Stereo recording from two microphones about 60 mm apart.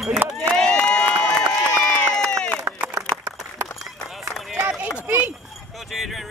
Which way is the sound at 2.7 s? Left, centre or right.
Right.